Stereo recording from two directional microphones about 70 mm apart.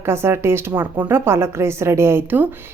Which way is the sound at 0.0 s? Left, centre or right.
Right.